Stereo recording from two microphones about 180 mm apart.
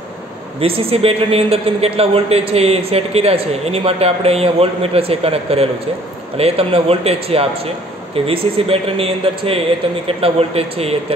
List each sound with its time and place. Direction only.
0.6 s a man's voice: 30° right (ahead or behind)